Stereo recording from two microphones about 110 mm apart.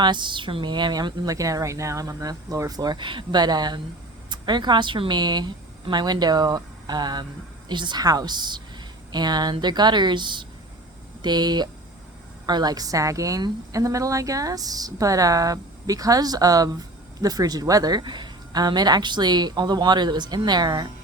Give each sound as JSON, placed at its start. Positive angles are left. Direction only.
{"t": 0.0, "sound": "a woman's voice", "side_deg": -45}